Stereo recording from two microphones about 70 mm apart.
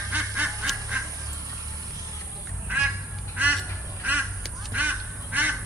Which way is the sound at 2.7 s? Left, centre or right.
Right.